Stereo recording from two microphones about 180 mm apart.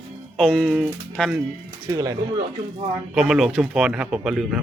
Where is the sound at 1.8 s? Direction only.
20° right (ahead or behind).